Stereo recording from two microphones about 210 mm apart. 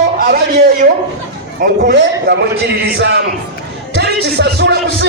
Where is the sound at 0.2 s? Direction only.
50° right (ahead or behind).